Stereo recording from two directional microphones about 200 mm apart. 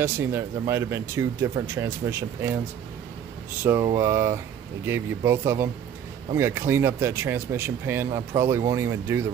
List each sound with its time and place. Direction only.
0.0 s speech: 10° right (ahead or behind)
3.6 s speech: 15° right (ahead or behind)